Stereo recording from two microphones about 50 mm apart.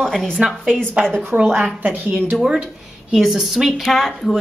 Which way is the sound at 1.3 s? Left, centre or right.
Right.